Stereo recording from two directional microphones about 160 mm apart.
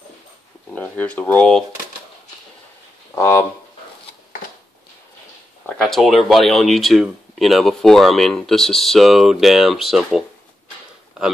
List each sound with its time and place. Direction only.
0.7 s speech: 10° left (ahead or behind)
3.2 s speech: 20° left (ahead or behind)
5.8 s speech: centre (ahead or behind)